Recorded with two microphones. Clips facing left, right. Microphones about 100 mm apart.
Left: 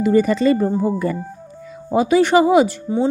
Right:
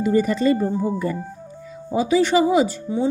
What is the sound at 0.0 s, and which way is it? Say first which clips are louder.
Speech: left 3 dB; 85° left.